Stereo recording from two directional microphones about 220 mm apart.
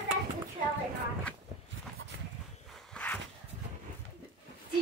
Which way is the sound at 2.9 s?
5° left (ahead or behind).